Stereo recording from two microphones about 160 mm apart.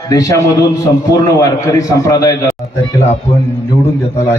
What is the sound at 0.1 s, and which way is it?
A man's voice, 20° left (ahead or behind).